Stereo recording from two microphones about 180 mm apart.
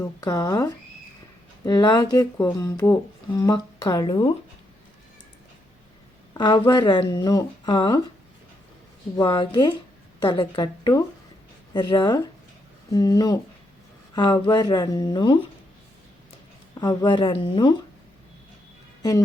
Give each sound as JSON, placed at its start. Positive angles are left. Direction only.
{"t": 0.0, "sound": "speech", "side_deg": 20}
{"t": 6.3, "sound": "speech", "side_deg": 25}
{"t": 9.1, "sound": "speech", "side_deg": 25}
{"t": 16.8, "sound": "speech", "side_deg": 25}